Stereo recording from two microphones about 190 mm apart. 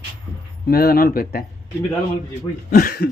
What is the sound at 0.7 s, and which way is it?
Speech, 55° left (ahead or behind).